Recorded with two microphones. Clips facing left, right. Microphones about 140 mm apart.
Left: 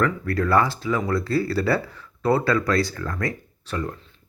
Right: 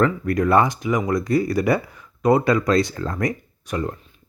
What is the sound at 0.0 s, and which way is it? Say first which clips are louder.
Speech: right 4 dB; 20° right (ahead or behind).